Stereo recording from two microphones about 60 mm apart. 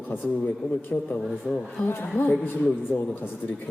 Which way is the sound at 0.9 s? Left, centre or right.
Centre.